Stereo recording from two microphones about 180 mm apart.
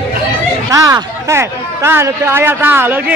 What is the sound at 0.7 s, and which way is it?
Speech, 20° right (ahead or behind).